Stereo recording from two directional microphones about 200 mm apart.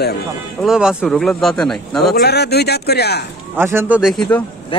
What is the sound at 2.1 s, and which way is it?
Speech, 55° left (ahead or behind).